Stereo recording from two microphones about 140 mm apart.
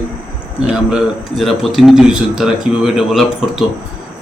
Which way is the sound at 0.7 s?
5° right (ahead or behind).